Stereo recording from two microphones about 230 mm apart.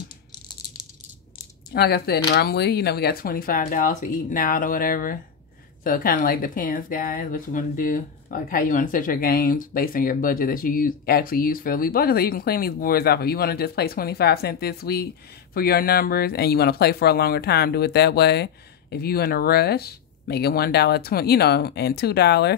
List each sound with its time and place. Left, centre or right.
1.7 s speech: left